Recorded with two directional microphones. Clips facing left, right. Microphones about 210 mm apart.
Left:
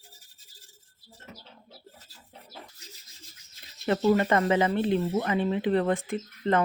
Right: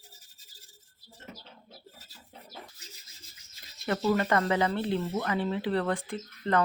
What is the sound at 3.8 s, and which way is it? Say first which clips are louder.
Speech: left 4 dB; 20° left (ahead or behind).